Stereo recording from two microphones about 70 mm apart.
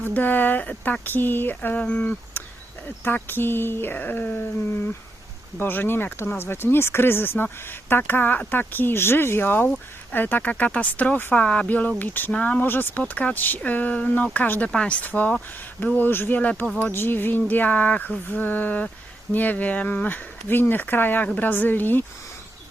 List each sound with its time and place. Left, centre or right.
0.0 s speech: left
5.5 s speech: left
16.4 s speech: centre
16.8 s speech: left